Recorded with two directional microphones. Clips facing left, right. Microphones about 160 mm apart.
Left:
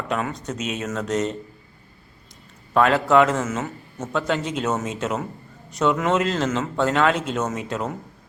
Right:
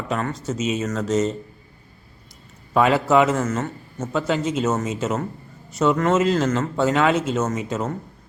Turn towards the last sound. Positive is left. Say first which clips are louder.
# right 2 dB
turn(degrees=0)  # may be behind; listen again after turning